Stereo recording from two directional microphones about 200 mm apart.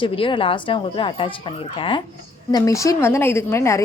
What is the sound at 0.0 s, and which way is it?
A woman's voice, 25° left (ahead or behind).